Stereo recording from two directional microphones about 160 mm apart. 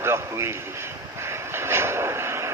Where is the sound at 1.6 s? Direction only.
15° right (ahead or behind).